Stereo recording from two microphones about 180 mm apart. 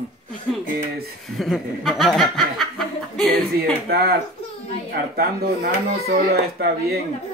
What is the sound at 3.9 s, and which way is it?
Speech, 60° right (ahead or behind).